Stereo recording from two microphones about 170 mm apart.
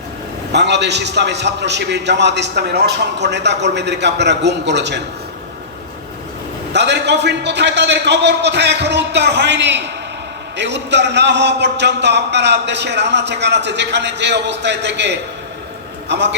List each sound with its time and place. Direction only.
0.5 s a man's voice: 90° right
6.7 s a man's voice: 90° right